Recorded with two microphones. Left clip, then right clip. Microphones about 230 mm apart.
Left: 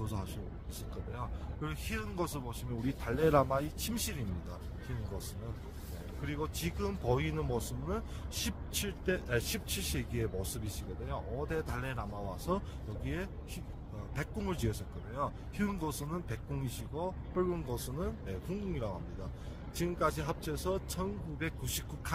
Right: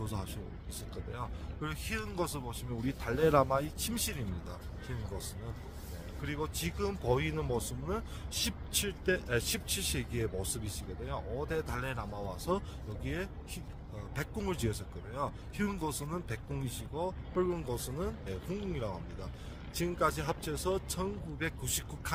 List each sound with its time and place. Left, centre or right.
0.0 s speech: centre
6.2 s speech: centre